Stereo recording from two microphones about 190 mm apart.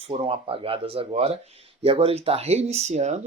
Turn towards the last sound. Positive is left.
turn(degrees=-35)  # may be behind; listen again after turning